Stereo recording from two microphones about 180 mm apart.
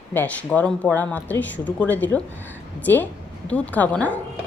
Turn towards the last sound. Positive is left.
turn(degrees=10)  # may be behind; listen again after turning